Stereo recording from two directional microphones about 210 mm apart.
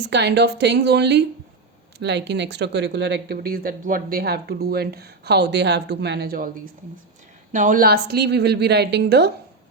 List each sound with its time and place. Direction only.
0.0 s speech: 55° right (ahead or behind)
7.5 s speech: 40° right (ahead or behind)